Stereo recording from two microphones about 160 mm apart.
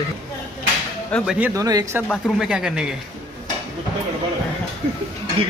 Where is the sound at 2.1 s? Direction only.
5° right (ahead or behind).